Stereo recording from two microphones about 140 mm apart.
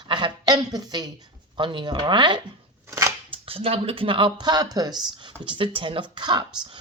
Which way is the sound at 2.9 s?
25° right (ahead or behind).